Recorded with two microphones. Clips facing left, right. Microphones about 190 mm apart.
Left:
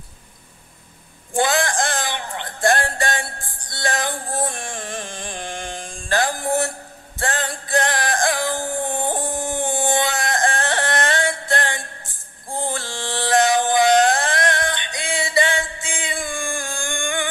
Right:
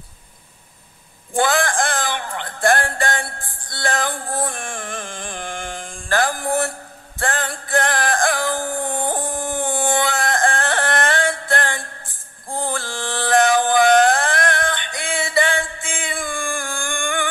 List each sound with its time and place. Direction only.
1.3 s music: 20° left (ahead or behind)